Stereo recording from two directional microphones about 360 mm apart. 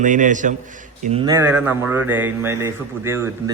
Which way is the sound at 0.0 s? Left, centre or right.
Right.